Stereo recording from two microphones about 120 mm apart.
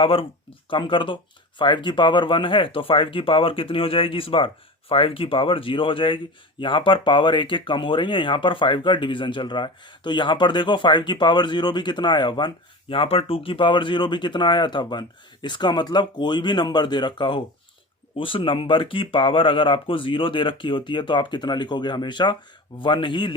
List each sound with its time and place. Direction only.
0.0 s speech: 50° left (ahead or behind)